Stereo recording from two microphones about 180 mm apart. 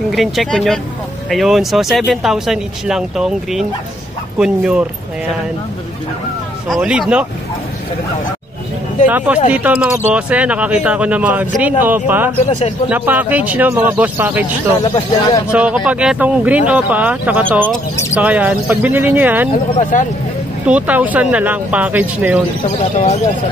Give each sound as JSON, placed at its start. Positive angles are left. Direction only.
{"t": 0.1, "sound": "speech", "side_deg": 0}
{"t": 6.7, "sound": "speech", "side_deg": -5}
{"t": 9.0, "sound": "speech", "side_deg": -10}
{"t": 14.8, "sound": "speech", "side_deg": 25}
{"t": 15.5, "sound": "speech", "side_deg": -5}
{"t": 19.8, "sound": "speech", "side_deg": 45}
{"t": 20.6, "sound": "speech", "side_deg": -10}
{"t": 22.9, "sound": "speech", "side_deg": 40}